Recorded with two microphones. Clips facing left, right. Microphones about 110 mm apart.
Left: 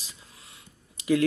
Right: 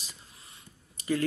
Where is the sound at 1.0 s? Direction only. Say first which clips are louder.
Left 6 dB; 85° left.